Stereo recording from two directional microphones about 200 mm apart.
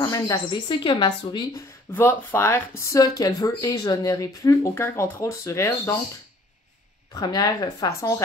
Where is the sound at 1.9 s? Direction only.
10° left (ahead or behind).